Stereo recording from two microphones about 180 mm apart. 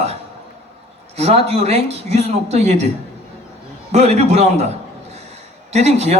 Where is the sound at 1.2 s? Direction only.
35° right (ahead or behind).